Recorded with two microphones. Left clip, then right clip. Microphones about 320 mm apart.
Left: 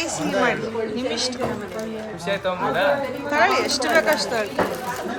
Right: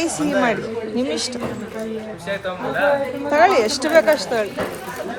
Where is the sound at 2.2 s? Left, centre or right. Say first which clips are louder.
Left 3 dB; left.